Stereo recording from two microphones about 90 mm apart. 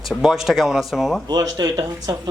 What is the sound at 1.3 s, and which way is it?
Speech, 50° right (ahead or behind).